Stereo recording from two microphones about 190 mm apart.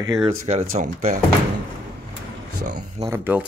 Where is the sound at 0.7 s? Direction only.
40° right (ahead or behind).